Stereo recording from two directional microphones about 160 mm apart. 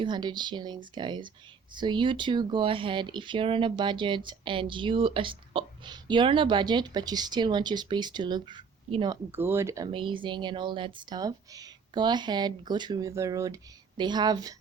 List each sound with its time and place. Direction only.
0.0 s speech: 30° right (ahead or behind)
9.3 s speech: 15° right (ahead or behind)
9.9 s speech: 30° right (ahead or behind)